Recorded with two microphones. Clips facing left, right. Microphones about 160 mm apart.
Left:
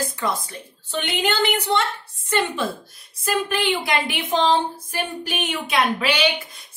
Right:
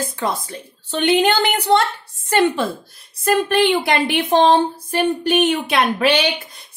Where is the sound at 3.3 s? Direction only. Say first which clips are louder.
Right 7 dB; 65° right (ahead or behind).